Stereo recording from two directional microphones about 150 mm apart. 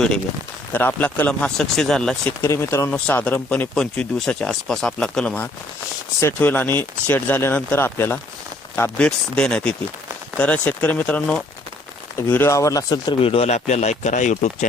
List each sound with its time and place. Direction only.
0.7 s speech: 10° left (ahead or behind)
2.4 s speech: 20° left (ahead or behind)
13.2 s speech: 40° left (ahead or behind)